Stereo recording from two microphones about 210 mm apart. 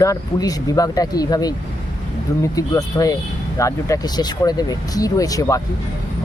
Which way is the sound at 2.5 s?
15° left (ahead or behind).